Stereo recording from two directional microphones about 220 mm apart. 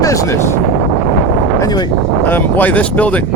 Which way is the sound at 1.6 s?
20° left (ahead or behind).